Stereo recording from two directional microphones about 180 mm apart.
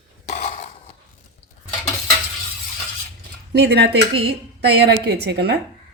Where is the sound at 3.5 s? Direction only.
65° right (ahead or behind).